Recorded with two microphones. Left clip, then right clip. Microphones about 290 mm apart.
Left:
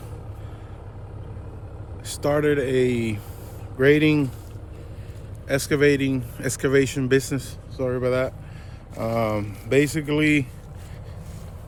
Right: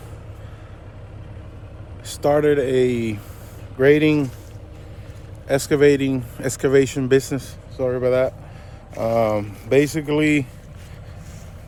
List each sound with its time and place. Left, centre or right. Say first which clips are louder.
2.0 s speech: right 4 dB; centre
5.5 s speech: right 4 dB; centre